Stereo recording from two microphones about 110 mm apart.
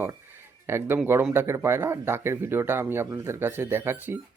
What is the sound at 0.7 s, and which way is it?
Speech, 20° right (ahead or behind).